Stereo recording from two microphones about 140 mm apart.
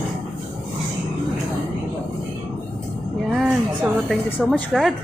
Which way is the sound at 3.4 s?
5° right (ahead or behind).